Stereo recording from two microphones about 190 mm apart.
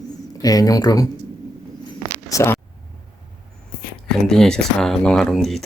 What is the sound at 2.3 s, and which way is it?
Speech, 15° left (ahead or behind).